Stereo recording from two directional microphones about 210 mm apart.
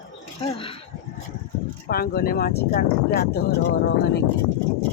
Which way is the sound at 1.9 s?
45° left (ahead or behind).